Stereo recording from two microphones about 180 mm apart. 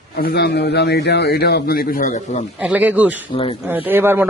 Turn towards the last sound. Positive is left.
turn(degrees=-10)  # may be behind; listen again after turning